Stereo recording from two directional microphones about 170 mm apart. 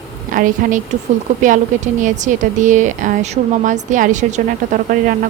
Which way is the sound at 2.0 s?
45° right (ahead or behind).